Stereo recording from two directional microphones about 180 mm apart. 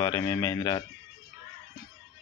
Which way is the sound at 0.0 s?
15° left (ahead or behind).